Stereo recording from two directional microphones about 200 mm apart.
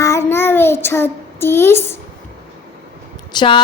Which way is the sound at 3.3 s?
25° left (ahead or behind).